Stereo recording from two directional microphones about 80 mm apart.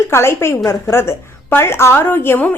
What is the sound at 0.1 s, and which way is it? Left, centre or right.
A woman's voice, left.